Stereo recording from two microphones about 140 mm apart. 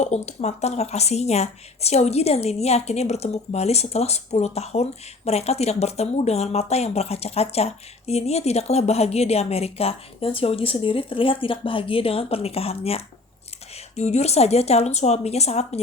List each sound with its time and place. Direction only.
0.0 s a woman's voice: 55° left (ahead or behind)